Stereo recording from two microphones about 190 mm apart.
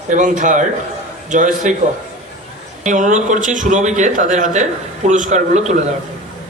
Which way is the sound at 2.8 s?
40° right (ahead or behind).